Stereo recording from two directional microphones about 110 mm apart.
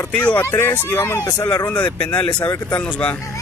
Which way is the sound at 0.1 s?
15° left (ahead or behind).